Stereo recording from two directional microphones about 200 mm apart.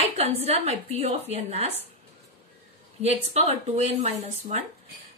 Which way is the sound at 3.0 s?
30° right (ahead or behind).